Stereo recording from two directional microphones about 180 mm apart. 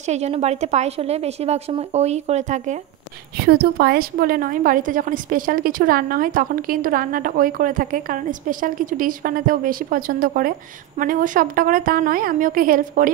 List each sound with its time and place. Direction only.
0.0 s a woman's voice: 40° right (ahead or behind)
3.3 s a woman's voice: 55° right (ahead or behind)